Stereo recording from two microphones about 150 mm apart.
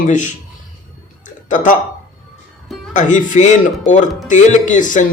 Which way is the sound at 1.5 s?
60° left (ahead or behind).